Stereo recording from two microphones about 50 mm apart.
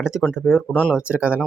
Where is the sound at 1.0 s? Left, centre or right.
Right.